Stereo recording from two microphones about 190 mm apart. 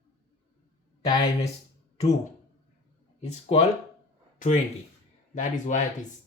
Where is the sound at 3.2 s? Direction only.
35° left (ahead or behind).